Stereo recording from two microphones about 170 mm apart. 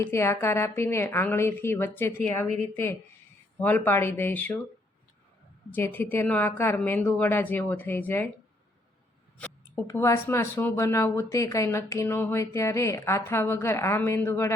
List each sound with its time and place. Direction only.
0.0 s speech: 15° left (ahead or behind)
5.7 s speech: 10° left (ahead or behind)
9.4 s speech: 10° left (ahead or behind)